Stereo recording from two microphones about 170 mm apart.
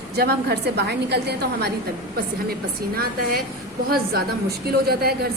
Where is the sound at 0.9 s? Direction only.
75° right (ahead or behind).